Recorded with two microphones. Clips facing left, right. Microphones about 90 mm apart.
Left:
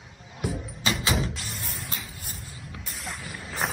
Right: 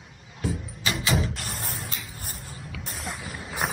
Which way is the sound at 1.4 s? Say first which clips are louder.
Right 3 dB; 50° right (ahead or behind).